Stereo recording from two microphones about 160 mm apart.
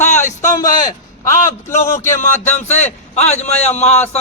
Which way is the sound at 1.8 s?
50° left (ahead or behind).